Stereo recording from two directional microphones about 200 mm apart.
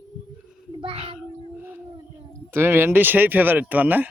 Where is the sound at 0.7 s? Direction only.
30° right (ahead or behind).